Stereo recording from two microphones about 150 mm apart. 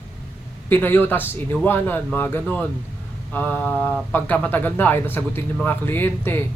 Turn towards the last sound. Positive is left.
turn(degrees=15)  # may be behind; listen again after turning